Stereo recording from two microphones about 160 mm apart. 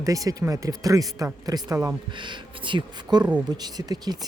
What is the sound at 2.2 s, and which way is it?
Speech, 30° right (ahead or behind).